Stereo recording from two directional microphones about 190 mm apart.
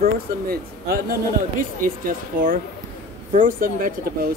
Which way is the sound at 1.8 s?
45° right (ahead or behind).